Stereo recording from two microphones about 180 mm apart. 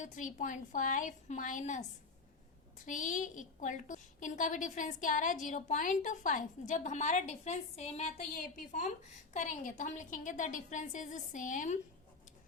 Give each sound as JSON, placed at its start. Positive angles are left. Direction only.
{"t": 0.0, "sound": "a woman's voice", "side_deg": 45}